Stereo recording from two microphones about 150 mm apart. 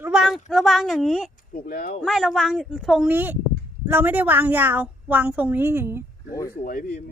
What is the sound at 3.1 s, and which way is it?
A woman's voice, 10° right (ahead or behind).